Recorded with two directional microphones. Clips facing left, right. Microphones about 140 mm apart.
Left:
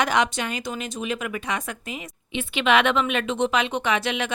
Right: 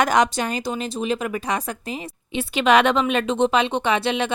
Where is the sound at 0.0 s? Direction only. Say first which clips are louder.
Right 4 dB; 40° right (ahead or behind).